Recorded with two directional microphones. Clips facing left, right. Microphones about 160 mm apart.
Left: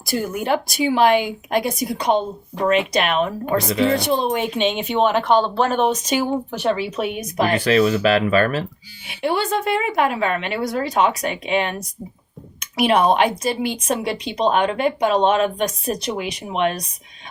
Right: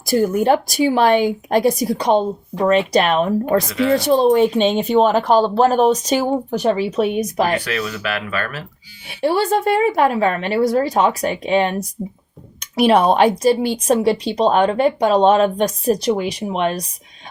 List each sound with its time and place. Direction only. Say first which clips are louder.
0.1 s speech: right 6 dB; 40° right (ahead or behind)
3.7 s speech: even; 25° left (ahead or behind)
4.1 s speech: right 7 dB; 35° right (ahead or behind)
7.6 s speech: left 8 dB; 30° left (ahead or behind)
9.2 s speech: right 4 dB; 40° right (ahead or behind)
12.7 s speech: right 3 dB; 35° right (ahead or behind)